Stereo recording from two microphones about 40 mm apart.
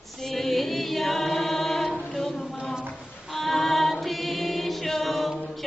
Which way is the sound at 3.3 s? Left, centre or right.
Centre.